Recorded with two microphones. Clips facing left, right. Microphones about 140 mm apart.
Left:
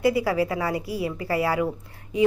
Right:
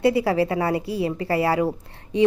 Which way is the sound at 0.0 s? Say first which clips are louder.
Right 2 dB; 30° right (ahead or behind).